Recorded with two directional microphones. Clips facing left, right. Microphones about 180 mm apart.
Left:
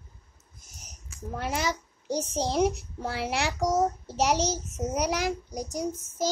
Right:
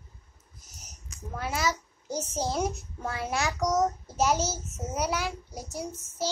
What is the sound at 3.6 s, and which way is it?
Speech, 30° left (ahead or behind).